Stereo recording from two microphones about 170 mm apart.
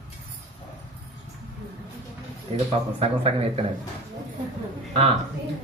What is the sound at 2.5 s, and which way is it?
Speech, 35° right (ahead or behind).